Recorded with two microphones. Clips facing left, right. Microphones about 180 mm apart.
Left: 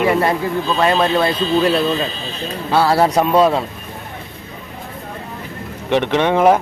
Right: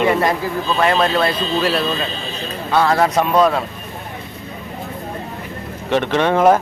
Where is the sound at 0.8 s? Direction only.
20° left (ahead or behind).